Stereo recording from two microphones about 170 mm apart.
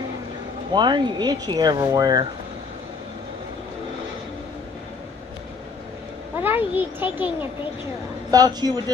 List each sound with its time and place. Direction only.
0.7 s speech: 25° right (ahead or behind)
6.4 s a child's voice: 10° right (ahead or behind)
8.3 s speech: 25° right (ahead or behind)